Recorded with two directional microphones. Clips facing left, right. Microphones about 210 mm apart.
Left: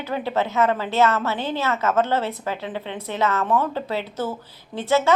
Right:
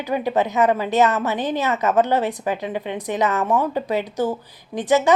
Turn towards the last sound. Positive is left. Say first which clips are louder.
# right 2 dB
turn(degrees=-15)  # may be behind; listen again after turning